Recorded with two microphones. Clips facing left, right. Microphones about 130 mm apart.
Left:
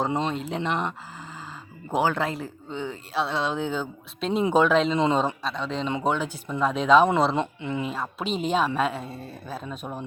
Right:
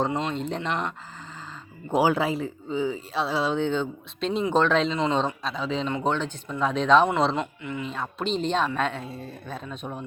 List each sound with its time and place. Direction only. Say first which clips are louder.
0.3 s speech: left 1 dB; 5° left (ahead or behind)
7.3 s speech: left 3 dB; 25° left (ahead or behind)
7.9 s speech: even; 5° left (ahead or behind)